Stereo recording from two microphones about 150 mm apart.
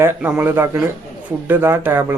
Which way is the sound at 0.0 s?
10° right (ahead or behind).